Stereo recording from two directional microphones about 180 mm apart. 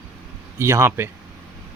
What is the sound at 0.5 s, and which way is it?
Speech, 15° right (ahead or behind).